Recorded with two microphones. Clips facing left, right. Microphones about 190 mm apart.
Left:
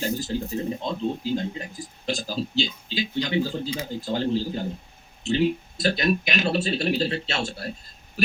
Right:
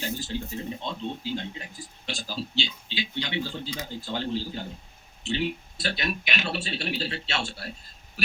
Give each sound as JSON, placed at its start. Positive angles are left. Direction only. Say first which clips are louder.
{"t": 0.0, "sound": "speech", "louder": "left 5 dB", "side_deg": 40}